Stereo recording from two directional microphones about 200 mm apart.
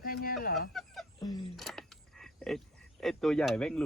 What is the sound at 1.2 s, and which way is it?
Speech, 20° left (ahead or behind).